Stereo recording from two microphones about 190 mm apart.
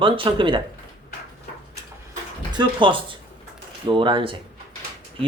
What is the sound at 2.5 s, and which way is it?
Speech, 25° right (ahead or behind).